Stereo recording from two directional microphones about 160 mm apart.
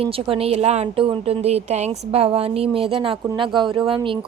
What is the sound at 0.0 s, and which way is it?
A woman's voice, 35° right (ahead or behind).